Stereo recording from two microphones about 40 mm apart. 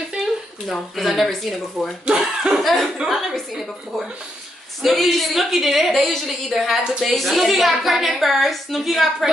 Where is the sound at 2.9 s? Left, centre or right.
Centre.